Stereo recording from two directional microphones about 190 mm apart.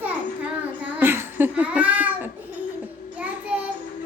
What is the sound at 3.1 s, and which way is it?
Child singing, 5° right (ahead or behind).